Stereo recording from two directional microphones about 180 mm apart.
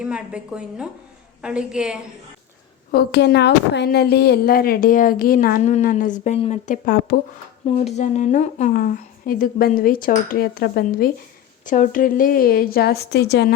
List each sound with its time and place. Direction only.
0.0 s a woman's voice: 5° right (ahead or behind)
2.9 s a woman's voice: 65° left (ahead or behind)
7.9 s a woman's voice: 40° left (ahead or behind); by 11.1 s 55° left (ahead or behind)
11.6 s speech: 45° left (ahead or behind); by 13.5 s 65° left (ahead or behind)